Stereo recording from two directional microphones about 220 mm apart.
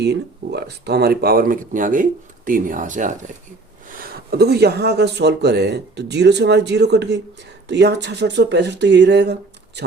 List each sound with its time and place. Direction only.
0.0 s speech: 50° right (ahead or behind)